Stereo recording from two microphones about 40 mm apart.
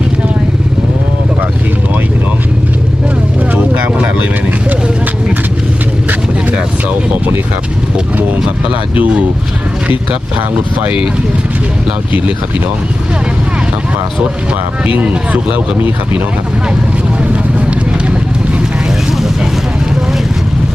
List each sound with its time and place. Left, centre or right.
3.5 s vehicle: right
8.7 s speech: right
14.8 s speech: right
17.3 s vehicle: right